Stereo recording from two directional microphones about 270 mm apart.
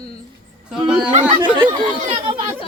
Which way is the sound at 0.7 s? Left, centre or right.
Centre.